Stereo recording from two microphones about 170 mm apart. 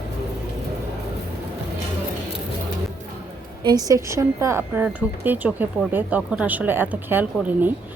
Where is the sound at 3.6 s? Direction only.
20° right (ahead or behind).